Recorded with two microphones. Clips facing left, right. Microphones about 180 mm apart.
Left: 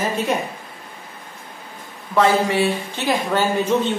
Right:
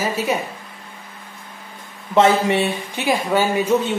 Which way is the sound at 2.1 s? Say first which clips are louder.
Right 2 dB; 20° right (ahead or behind).